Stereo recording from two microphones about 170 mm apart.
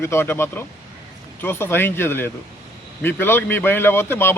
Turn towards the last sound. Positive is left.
turn(degrees=15)  # may be behind; listen again after turning